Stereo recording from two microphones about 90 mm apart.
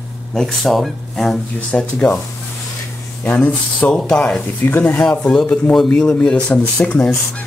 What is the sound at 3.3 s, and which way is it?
Speech, 15° left (ahead or behind).